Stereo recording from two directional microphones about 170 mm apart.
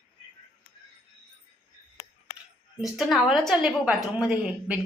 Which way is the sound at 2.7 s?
Centre (ahead or behind).